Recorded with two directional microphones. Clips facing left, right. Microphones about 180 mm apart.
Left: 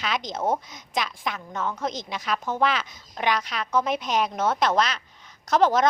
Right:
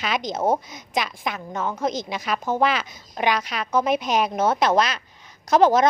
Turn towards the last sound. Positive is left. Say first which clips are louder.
# right 4 dB
turn(degrees=-10)  # may be behind; listen again after turning